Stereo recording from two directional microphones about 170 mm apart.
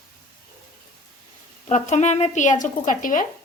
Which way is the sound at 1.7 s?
45° left (ahead or behind).